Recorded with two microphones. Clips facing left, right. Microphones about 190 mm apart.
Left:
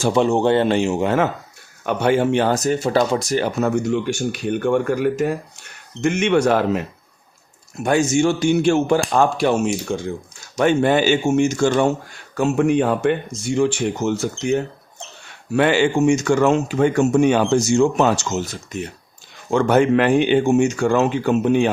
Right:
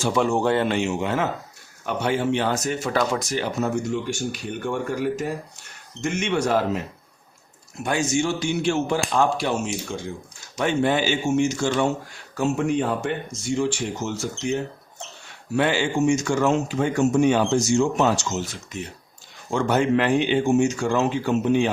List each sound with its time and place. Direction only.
0.1 s a man's voice: 25° left (ahead or behind); by 1.2 s 40° left (ahead or behind)
1.8 s speech: 60° left (ahead or behind); by 3.4 s 35° left (ahead or behind)
3.6 s a man's voice: 70° left (ahead or behind)
7.9 s speech: 50° left (ahead or behind)
12.3 s a man's voice: 65° left (ahead or behind)
18.4 s speech: 40° left (ahead or behind)
19.5 s a man's voice: 60° left (ahead or behind)